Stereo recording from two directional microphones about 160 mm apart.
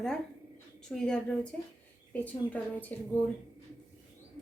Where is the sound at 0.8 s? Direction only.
5° left (ahead or behind).